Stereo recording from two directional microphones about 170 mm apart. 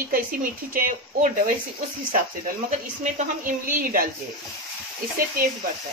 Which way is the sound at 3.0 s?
50° right (ahead or behind).